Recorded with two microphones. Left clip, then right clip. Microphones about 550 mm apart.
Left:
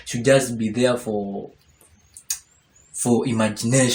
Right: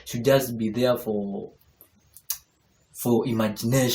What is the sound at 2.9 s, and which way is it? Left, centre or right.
Speech, right.